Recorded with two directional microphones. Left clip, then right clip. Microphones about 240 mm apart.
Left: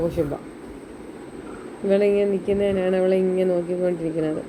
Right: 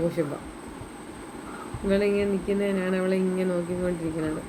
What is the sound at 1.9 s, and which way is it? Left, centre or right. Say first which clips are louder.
Speech: left 5 dB; centre.